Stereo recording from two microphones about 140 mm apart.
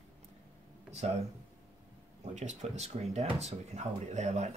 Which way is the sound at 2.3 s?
55° right (ahead or behind).